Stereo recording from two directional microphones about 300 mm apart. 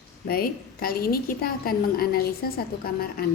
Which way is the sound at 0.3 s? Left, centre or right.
Left.